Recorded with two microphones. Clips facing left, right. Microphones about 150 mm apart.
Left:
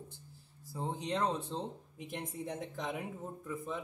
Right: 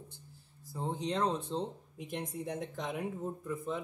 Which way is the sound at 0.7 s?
5° left (ahead or behind).